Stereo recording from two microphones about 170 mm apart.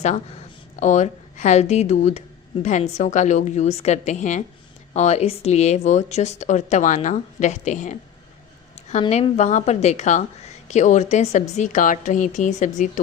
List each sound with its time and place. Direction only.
0.8 s a woman's voice: 45° left (ahead or behind)